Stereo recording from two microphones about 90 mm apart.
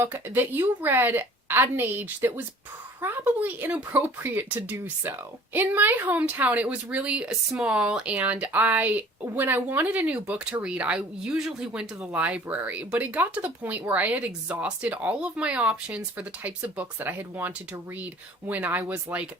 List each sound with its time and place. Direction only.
0.0 s a woman's voice: 25° right (ahead or behind)